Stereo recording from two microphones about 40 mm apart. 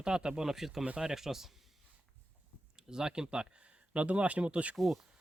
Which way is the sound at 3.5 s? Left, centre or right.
Right.